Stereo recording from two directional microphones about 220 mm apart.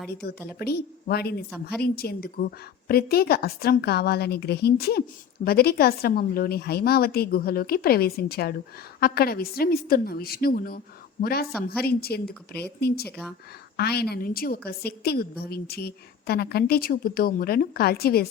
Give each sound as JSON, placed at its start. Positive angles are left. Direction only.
{"t": 0.1, "sound": "a woman's voice", "side_deg": 45}